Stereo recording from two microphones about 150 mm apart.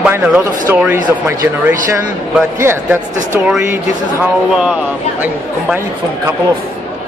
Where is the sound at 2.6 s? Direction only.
15° right (ahead or behind).